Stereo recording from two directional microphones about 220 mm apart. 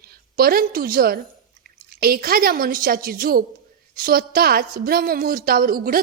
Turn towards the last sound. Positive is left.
turn(degrees=-40)  # may be behind; listen again after turning